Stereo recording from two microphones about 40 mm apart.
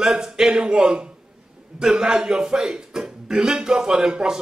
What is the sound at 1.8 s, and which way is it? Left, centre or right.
A man's voice, centre.